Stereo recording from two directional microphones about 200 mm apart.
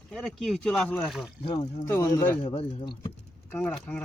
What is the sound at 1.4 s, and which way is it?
Speech, 30° left (ahead or behind).